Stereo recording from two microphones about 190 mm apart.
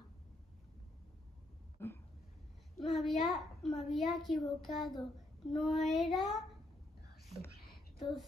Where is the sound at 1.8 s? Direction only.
10° left (ahead or behind).